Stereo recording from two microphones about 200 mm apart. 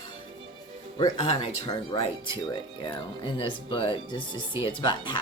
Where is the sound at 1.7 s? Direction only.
20° left (ahead or behind).